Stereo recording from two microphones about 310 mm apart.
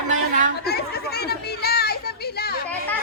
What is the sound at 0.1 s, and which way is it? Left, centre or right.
Chatter, right.